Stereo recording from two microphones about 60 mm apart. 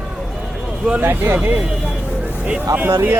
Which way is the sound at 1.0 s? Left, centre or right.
Right.